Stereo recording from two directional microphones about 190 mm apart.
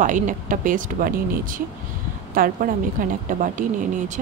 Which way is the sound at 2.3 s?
50° right (ahead or behind).